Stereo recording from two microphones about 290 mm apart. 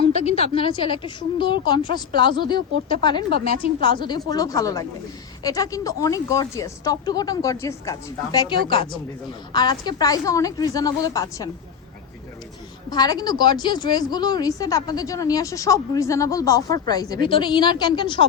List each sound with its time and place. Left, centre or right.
0.0 s a woman's voice: left
8.6 s a woman's voice: right
9.5 s a woman's voice: centre
12.9 s a woman's voice: centre